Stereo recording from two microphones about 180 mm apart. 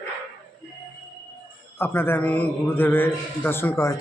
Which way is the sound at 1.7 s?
10° left (ahead or behind).